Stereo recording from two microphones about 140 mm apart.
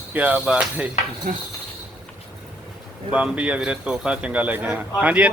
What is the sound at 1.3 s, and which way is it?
Pulleys, 60° right (ahead or behind).